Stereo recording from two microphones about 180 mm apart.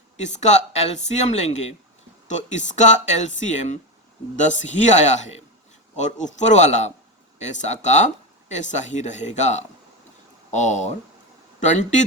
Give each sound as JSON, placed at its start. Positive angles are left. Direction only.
{"t": 0.3, "sound": "speech", "side_deg": 40}